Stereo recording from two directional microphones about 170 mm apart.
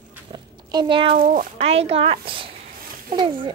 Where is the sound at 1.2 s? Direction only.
55° right (ahead or behind).